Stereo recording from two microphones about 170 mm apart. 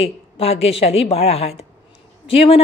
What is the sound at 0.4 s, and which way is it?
Speech, 35° left (ahead or behind).